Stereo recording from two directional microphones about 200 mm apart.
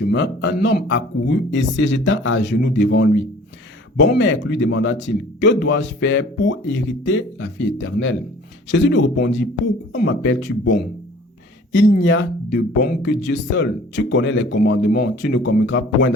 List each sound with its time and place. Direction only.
0.1 s speech: 60° left (ahead or behind)